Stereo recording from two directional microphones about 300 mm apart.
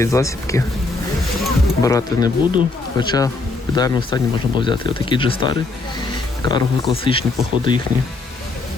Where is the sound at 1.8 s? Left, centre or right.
Centre.